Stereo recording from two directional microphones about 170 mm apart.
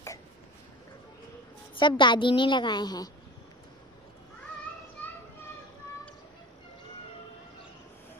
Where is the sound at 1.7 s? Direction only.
30° left (ahead or behind).